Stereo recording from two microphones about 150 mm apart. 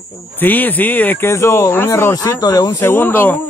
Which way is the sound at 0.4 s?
10° left (ahead or behind).